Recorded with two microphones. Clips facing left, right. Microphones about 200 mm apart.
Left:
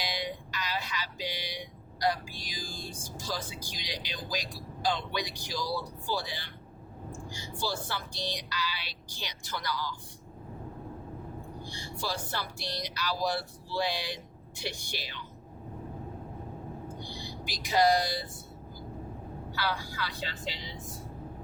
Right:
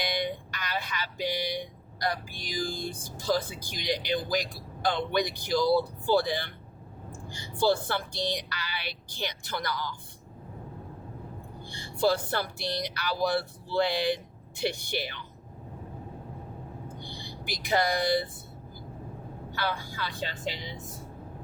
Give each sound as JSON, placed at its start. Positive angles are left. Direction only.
{"t": 0.0, "sound": "music", "side_deg": -55}
{"t": 2.0, "sound": "speech", "side_deg": -55}
{"t": 11.6, "sound": "speech", "side_deg": -55}
{"t": 17.4, "sound": "speech", "side_deg": -55}